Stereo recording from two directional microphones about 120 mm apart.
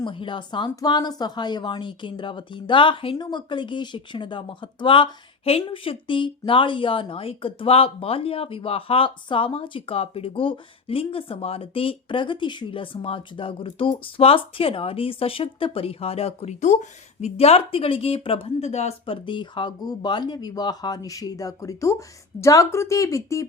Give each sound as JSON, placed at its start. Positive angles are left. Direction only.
{"t": 0.0, "sound": "speech", "side_deg": 45}
{"t": 19.0, "sound": "speech", "side_deg": 45}